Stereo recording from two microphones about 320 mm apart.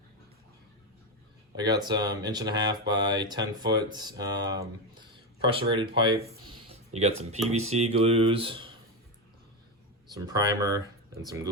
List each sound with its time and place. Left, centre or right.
1.5 s speech: centre
10.1 s speech: centre